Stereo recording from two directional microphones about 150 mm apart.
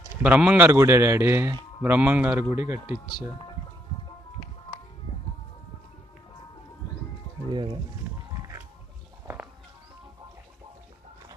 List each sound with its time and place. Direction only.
0.2 s a man's voice: 10° right (ahead or behind)
9.2 s music: 15° right (ahead or behind)